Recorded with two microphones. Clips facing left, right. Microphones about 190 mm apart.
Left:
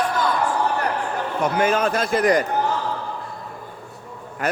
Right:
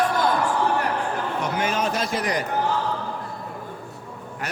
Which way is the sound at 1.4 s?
55° left (ahead or behind).